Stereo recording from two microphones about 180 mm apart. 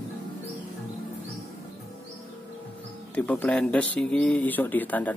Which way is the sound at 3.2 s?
5° left (ahead or behind).